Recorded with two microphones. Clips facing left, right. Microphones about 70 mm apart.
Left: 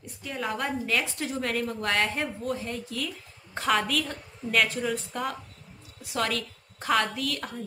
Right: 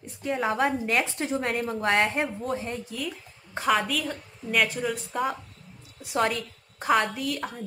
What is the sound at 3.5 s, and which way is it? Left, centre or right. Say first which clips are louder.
A woman's voice: right 1 dB; centre.